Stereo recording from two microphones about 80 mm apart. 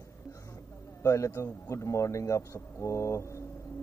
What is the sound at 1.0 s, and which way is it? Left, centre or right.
Speech, left.